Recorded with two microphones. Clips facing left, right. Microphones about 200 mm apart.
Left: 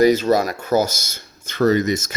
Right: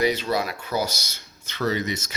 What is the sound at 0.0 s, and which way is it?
Speech, 45° left (ahead or behind).